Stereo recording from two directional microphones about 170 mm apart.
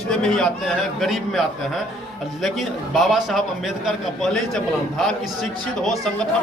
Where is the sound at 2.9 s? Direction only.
Centre (ahead or behind).